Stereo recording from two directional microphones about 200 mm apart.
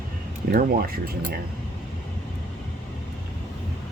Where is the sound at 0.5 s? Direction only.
45° right (ahead or behind).